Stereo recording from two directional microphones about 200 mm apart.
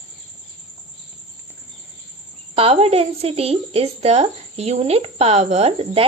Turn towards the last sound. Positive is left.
turn(degrees=-30)  # may be behind; listen again after turning